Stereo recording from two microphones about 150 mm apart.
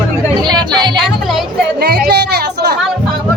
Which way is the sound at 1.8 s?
90° right.